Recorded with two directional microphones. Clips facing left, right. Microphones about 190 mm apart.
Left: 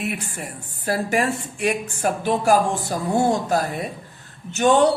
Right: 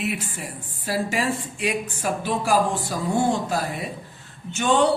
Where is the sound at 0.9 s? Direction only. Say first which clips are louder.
Left 3 dB; 55° left (ahead or behind).